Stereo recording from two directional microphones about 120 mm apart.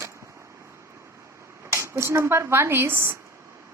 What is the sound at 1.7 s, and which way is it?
Speech, 25° right (ahead or behind).